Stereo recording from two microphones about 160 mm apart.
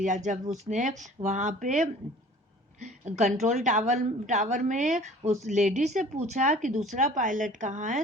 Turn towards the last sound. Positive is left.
turn(degrees=-50)  # may be behind; listen again after turning